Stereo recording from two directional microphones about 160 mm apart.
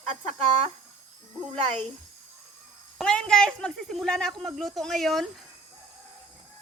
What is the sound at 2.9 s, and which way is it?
A woman's voice, 5° left (ahead or behind).